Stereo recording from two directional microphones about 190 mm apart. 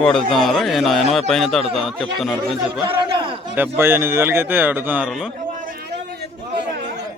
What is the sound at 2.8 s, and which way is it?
Speech, 25° right (ahead or behind).